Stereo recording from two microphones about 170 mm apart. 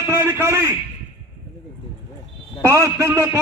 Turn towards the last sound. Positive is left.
turn(degrees=-15)  # may be behind; listen again after turning